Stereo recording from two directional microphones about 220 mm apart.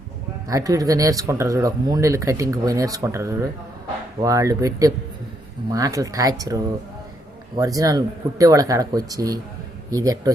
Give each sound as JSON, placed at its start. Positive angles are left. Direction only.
{"t": 0.4, "sound": "speech", "side_deg": -15}